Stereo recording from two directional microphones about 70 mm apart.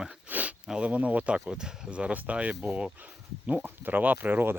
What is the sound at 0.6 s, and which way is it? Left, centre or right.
Speech, centre.